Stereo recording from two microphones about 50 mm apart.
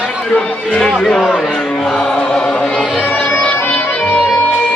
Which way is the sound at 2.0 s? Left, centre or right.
Centre.